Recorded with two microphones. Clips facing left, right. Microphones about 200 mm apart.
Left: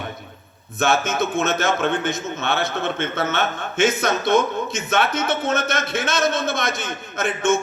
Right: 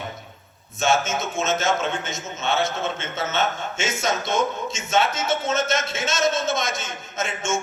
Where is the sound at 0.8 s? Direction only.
60° left (ahead or behind).